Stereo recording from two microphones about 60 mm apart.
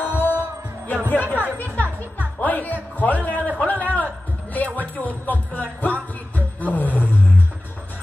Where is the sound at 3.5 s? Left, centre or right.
Left.